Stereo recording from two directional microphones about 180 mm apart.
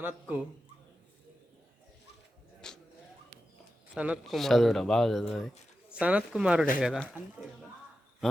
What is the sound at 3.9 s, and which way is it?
Speech, 5° right (ahead or behind).